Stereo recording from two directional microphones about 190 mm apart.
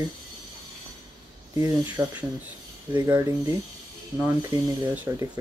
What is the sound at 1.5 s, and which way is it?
Speech, 15° right (ahead or behind).